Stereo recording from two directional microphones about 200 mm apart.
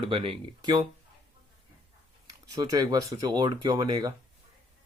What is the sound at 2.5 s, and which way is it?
Speech, 20° right (ahead or behind).